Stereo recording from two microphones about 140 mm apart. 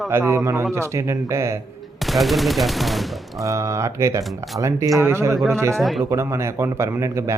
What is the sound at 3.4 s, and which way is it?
Speech, 20° right (ahead or behind).